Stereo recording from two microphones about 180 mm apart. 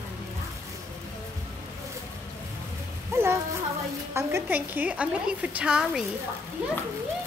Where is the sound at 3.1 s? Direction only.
15° right (ahead or behind).